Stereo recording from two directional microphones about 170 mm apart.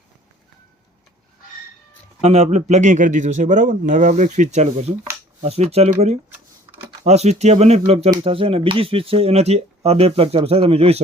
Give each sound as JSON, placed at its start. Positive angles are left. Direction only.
{"t": 2.2, "sound": "a man's voice", "side_deg": -35}